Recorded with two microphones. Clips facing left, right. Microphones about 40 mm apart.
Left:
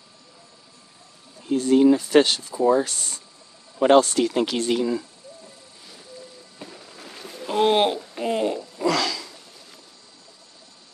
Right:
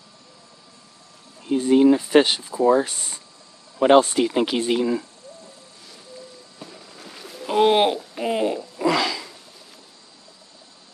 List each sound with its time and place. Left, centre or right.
1.4 s speech: centre
6.6 s a sound: centre
7.4 s speech: centre